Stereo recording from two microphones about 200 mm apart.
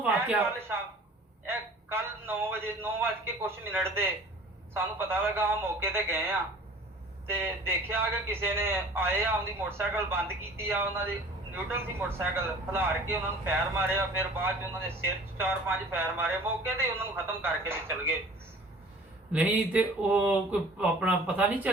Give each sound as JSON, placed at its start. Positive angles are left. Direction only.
{"t": 1.5, "sound": "a man's voice", "side_deg": -10}
{"t": 19.3, "sound": "a man's voice", "side_deg": -5}